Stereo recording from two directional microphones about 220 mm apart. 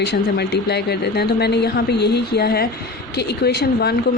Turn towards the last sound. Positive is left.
turn(degrees=45)  # may be behind; listen again after turning